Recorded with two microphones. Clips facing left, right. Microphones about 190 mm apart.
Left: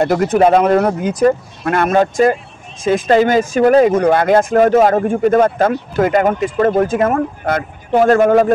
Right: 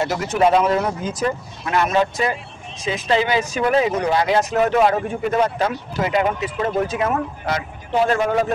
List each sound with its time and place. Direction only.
0.0 s speech: 55° left (ahead or behind)